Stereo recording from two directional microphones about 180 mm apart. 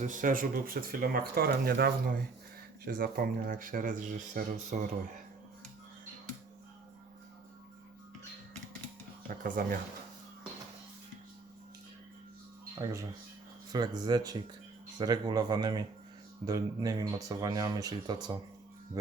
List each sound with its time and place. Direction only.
0.0 s speech: 45° right (ahead or behind)
9.4 s speech: 50° right (ahead or behind)
12.8 s speech: 15° right (ahead or behind)